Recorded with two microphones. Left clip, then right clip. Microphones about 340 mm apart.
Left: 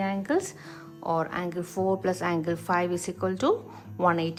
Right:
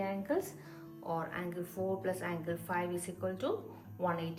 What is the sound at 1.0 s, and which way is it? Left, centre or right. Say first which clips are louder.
A woman's voice: left 10 dB; centre.